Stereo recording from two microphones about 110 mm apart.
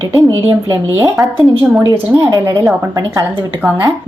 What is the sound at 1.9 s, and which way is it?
A woman's voice, 30° right (ahead or behind).